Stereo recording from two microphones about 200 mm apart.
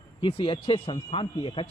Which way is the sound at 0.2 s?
25° left (ahead or behind).